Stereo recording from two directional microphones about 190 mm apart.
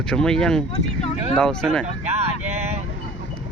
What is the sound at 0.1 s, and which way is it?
Speech, 5° left (ahead or behind).